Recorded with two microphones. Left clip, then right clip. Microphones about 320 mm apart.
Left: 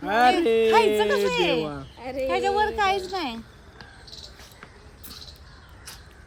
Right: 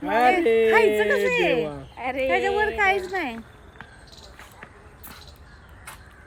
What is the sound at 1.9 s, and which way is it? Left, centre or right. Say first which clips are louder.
Speech: right 5 dB; right.